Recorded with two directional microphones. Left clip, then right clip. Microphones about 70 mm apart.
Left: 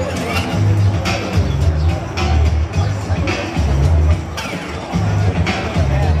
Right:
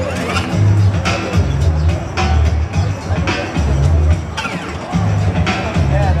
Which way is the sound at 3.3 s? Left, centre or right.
Right.